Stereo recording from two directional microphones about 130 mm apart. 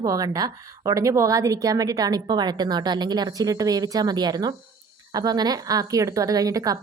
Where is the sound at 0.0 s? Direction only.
25° right (ahead or behind).